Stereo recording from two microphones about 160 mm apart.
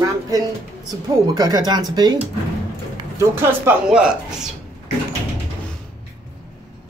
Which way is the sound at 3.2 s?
15° right (ahead or behind).